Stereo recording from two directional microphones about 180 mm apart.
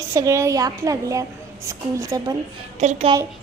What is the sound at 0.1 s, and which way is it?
A woman's voice, 15° right (ahead or behind).